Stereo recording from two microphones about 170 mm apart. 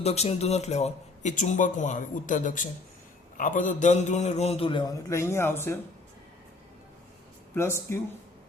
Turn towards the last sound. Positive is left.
turn(degrees=15)  # may be behind; listen again after turning